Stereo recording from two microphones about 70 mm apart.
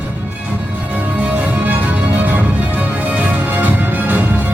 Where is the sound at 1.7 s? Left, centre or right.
Right.